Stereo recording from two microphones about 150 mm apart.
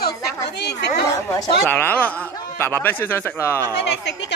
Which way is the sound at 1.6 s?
15° left (ahead or behind).